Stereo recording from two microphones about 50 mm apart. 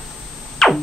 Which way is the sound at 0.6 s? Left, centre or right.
Centre.